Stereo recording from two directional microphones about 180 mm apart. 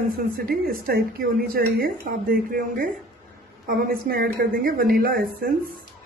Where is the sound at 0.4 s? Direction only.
55° right (ahead or behind).